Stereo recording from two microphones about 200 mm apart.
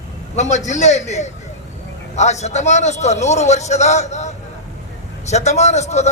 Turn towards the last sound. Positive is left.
turn(degrees=35)  # may be behind; listen again after turning